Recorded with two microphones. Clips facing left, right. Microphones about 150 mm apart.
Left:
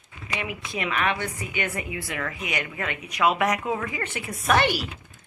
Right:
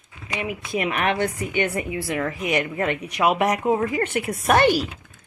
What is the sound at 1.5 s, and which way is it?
Speech, 30° right (ahead or behind).